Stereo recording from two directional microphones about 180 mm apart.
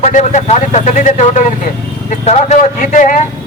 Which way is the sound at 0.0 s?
40° left (ahead or behind).